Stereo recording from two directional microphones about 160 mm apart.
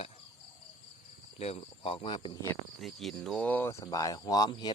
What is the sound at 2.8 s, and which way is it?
Speech, centre (ahead or behind).